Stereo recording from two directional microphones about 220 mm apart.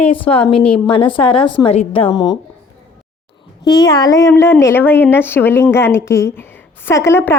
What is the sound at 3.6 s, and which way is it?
A woman's voice, 20° left (ahead or behind).